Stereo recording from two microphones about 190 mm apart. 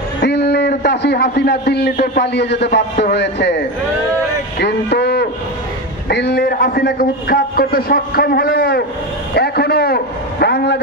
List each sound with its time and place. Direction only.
0.2 s a man's voice: 60° left (ahead or behind)
4.6 s a sound: 60° left (ahead or behind)
6.0 s a man's voice: 60° left (ahead or behind)